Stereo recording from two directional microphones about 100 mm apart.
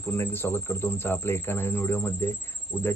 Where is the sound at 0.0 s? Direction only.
25° left (ahead or behind).